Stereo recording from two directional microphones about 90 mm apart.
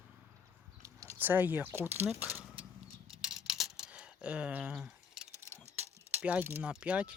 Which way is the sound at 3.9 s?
15° right (ahead or behind).